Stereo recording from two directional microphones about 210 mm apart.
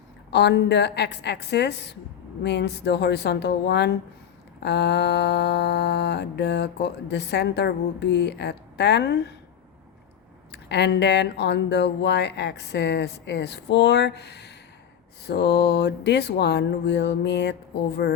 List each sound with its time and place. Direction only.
0.3 s mantra: 55° left (ahead or behind)
10.5 s mantra: 55° left (ahead or behind)